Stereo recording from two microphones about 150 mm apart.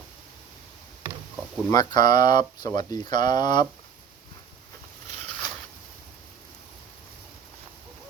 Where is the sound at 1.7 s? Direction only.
25° left (ahead or behind).